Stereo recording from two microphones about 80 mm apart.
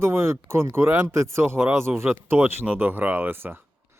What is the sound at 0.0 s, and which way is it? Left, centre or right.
Speech, right.